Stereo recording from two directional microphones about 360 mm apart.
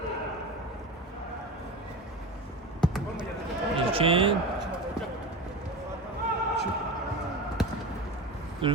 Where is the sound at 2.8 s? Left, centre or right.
Centre.